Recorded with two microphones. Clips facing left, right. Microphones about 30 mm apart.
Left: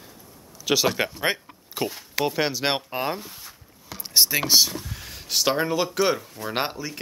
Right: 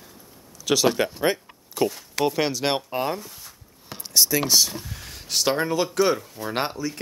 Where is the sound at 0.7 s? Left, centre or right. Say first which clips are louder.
Right 1 dB; centre.